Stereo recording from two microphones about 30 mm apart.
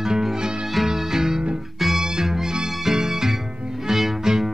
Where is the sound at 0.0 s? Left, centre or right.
Centre.